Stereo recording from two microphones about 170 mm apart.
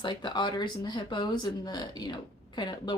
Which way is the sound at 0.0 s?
25° left (ahead or behind).